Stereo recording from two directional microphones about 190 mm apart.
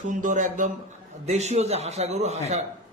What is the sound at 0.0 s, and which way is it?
A man's voice, 40° right (ahead or behind).